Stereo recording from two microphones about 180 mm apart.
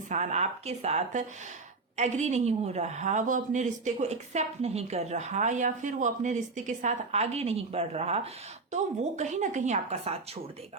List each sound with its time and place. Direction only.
0.1 s a woman's voice: 40° right (ahead or behind)